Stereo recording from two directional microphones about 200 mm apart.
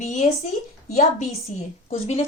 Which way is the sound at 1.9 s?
30° left (ahead or behind).